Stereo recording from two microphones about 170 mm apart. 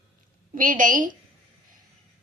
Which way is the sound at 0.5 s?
50° right (ahead or behind).